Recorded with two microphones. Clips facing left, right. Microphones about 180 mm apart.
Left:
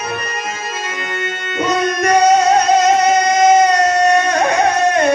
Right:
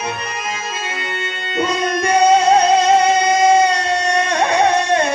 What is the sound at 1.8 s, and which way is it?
Music, 30° right (ahead or behind).